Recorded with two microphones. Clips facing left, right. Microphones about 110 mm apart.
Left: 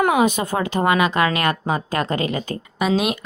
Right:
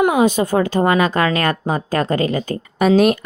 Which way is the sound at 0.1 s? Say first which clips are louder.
Right 3 dB; 30° right (ahead or behind).